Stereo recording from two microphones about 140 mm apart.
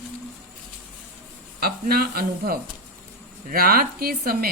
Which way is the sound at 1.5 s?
90° right.